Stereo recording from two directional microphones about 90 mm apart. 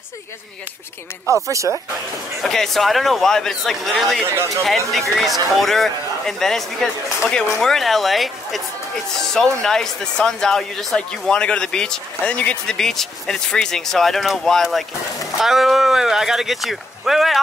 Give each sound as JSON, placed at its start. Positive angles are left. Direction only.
{"t": 1.5, "sound": "speech", "side_deg": -35}
{"t": 2.4, "sound": "a man's voice", "side_deg": 5}